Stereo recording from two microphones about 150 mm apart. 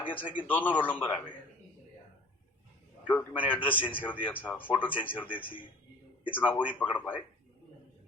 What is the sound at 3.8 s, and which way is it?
Speech, 35° left (ahead or behind).